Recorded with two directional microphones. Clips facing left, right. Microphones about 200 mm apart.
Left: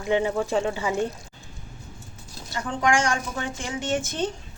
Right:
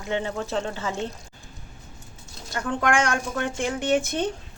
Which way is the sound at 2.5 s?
60° right (ahead or behind).